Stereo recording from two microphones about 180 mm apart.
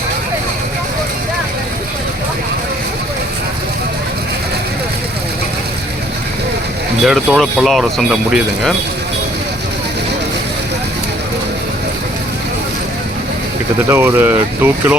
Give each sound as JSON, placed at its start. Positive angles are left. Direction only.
{"t": 7.0, "sound": "speech", "side_deg": 0}
{"t": 13.9, "sound": "speech", "side_deg": -10}